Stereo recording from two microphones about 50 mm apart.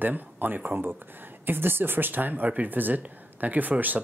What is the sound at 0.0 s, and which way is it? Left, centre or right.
Speech, right.